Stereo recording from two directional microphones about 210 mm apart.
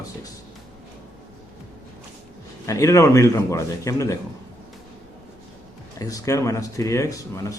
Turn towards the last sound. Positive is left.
turn(degrees=15)  # may be behind; listen again after turning